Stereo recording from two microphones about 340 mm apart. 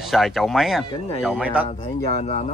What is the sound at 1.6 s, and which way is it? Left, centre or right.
Speech, centre.